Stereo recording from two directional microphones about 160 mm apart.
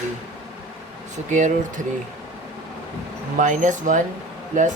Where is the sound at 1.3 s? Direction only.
50° right (ahead or behind).